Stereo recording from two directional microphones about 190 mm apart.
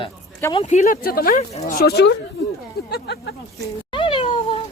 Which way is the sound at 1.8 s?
60° left (ahead or behind).